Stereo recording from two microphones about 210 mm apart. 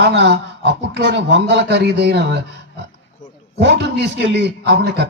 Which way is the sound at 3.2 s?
35° left (ahead or behind).